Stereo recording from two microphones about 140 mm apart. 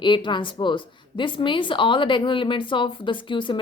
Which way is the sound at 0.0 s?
35° left (ahead or behind).